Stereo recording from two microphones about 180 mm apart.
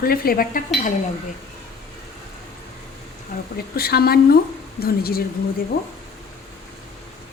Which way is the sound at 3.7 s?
60° left (ahead or behind).